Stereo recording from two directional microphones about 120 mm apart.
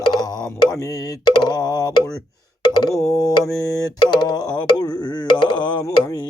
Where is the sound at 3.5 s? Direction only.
30° left (ahead or behind).